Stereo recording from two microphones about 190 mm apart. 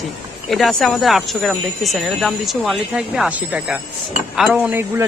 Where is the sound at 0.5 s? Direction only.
Centre (ahead or behind).